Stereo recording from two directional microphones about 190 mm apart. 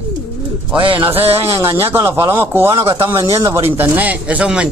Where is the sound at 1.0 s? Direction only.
30° right (ahead or behind).